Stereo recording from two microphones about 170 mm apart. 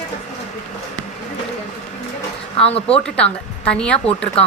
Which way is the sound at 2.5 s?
35° left (ahead or behind).